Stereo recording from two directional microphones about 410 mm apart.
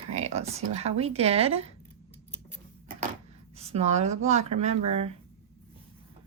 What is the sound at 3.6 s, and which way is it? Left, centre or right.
Speech, centre.